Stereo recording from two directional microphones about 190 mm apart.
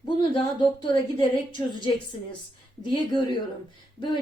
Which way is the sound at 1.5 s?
25° left (ahead or behind).